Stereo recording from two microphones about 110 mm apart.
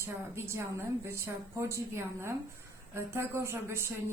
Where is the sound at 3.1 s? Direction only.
20° right (ahead or behind).